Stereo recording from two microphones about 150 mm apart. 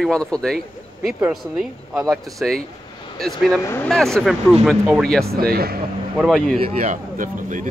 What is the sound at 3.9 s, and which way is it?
Speech, centre (ahead or behind).